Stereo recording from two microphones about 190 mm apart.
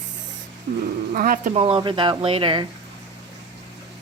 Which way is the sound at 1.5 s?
30° right (ahead or behind).